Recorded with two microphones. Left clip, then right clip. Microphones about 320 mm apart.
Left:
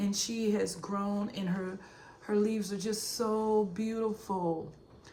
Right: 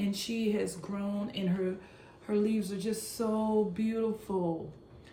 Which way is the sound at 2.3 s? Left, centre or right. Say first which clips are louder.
Even; centre.